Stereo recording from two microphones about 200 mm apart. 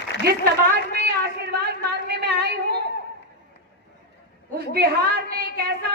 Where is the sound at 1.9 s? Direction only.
55° right (ahead or behind).